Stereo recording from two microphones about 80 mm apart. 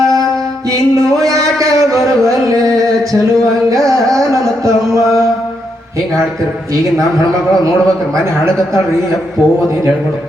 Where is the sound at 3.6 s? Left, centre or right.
Right.